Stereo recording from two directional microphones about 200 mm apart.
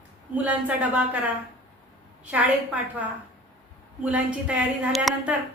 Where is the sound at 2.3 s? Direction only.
5° right (ahead or behind).